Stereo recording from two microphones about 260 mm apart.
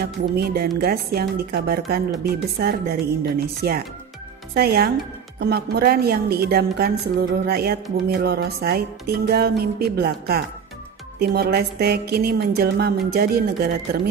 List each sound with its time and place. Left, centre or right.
0.0 s a woman's voice: right